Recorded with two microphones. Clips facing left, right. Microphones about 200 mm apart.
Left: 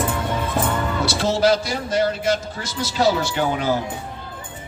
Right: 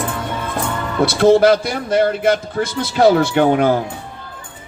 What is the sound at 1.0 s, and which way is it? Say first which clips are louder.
A man's voice: right 9 dB; 55° right (ahead or behind).